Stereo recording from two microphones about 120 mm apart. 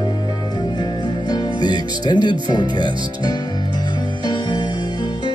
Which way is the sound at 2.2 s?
40° left (ahead or behind).